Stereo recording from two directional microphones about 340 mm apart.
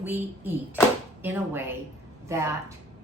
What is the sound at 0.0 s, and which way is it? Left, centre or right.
A woman's voice, centre.